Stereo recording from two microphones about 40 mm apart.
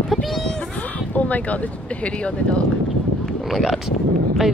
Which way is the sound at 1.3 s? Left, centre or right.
Left.